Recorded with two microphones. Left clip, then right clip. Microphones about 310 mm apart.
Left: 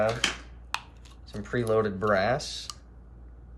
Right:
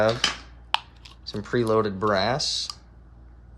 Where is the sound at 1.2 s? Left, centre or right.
Centre.